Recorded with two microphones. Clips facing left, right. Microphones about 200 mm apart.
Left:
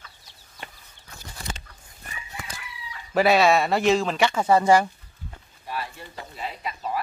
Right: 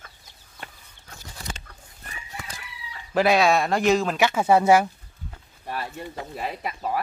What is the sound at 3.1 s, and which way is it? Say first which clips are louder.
Speech: left 1 dB; centre (ahead or behind).